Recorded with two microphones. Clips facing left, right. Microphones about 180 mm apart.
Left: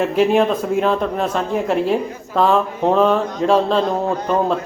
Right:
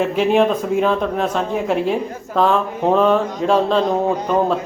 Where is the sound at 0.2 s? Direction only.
Centre (ahead or behind).